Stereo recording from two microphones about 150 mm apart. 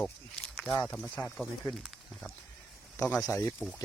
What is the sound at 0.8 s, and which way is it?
Speech, 5° left (ahead or behind).